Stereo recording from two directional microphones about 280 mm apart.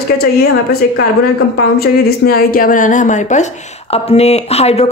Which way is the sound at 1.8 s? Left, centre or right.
Left.